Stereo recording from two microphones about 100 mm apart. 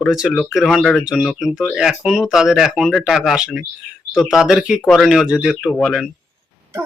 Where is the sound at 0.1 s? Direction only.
5° right (ahead or behind).